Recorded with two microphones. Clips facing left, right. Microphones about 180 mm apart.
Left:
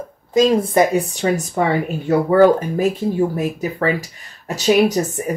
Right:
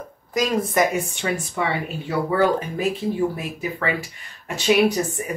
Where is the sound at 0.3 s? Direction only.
25° left (ahead or behind).